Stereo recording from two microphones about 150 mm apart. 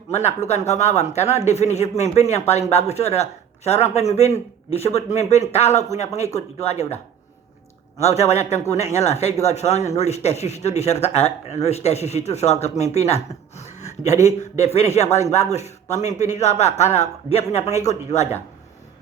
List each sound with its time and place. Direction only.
0.1 s speech: 45° left (ahead or behind)
8.0 s speech: 45° left (ahead or behind)